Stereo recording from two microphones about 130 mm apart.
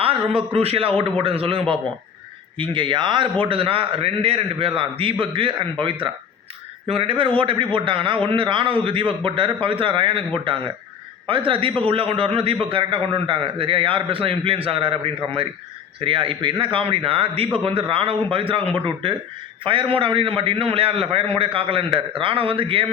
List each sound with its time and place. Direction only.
0.0 s a man's voice: 45° right (ahead or behind)
6.8 s a man's voice: 45° right (ahead or behind)
11.3 s a man's voice: 40° right (ahead or behind)